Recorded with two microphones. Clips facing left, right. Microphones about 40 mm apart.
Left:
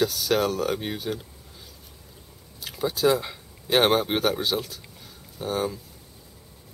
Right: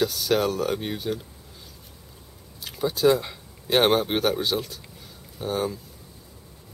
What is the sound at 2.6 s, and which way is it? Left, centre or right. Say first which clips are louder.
Speech: right 2 dB; centre.